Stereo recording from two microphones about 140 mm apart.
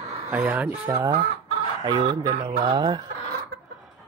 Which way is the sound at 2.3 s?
45° right (ahead or behind).